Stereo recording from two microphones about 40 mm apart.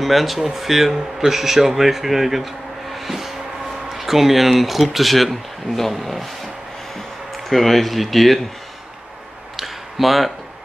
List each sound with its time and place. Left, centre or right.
0.0 s speech: centre
7.3 s speech: centre
9.6 s a sound: centre